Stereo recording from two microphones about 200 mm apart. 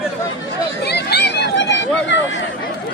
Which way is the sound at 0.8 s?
55° left (ahead or behind).